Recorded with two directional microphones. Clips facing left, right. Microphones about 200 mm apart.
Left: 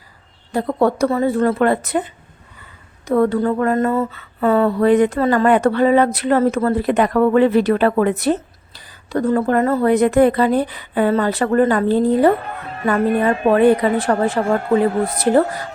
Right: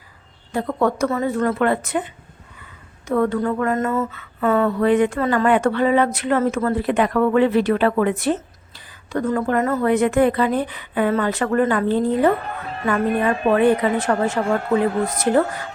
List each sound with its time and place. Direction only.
0.5 s speech: 35° left (ahead or behind)
3.1 s speech: 35° left (ahead or behind)